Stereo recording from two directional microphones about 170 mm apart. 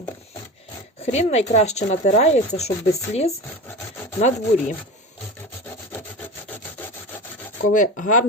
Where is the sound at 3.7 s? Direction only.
15° left (ahead or behind).